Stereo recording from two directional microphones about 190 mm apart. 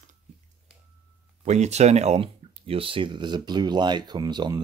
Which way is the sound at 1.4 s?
35° right (ahead or behind).